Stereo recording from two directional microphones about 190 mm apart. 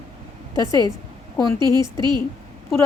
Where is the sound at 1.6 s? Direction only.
20° right (ahead or behind).